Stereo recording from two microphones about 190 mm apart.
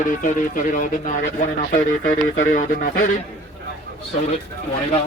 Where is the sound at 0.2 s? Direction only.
40° left (ahead or behind).